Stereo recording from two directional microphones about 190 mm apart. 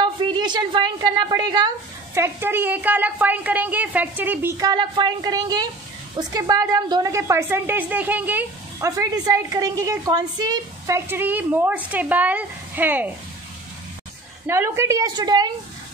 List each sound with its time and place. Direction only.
0.0 s a woman's voice: 25° right (ahead or behind)
2.1 s a woman's voice: 15° right (ahead or behind)
14.4 s a woman's voice: 15° right (ahead or behind)